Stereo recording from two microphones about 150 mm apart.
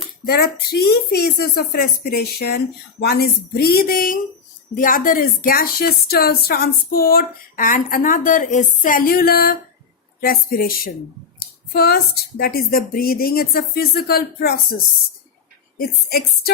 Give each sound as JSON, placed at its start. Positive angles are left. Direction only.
{"t": 0.3, "sound": "a woman's voice", "side_deg": 90}
{"t": 11.3, "sound": "speech", "side_deg": 90}
{"t": 15.8, "sound": "speech", "side_deg": 90}